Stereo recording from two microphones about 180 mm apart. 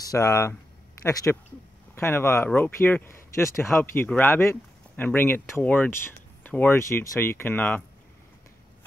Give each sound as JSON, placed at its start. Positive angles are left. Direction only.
{"t": 0.0, "sound": "speech", "side_deg": 20}